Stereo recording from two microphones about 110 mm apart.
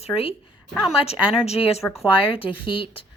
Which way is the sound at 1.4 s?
70° left (ahead or behind).